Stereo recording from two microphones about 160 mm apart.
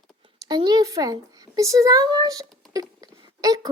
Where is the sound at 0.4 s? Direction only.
25° right (ahead or behind).